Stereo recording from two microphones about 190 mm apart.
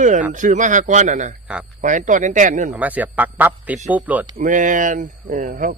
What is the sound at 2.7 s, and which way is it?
A man's voice, 10° right (ahead or behind).